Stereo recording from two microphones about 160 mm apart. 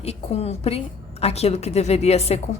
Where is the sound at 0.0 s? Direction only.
40° left (ahead or behind).